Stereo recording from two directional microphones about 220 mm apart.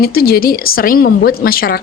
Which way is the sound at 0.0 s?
45° left (ahead or behind).